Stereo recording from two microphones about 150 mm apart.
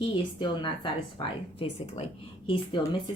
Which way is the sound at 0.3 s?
30° left (ahead or behind).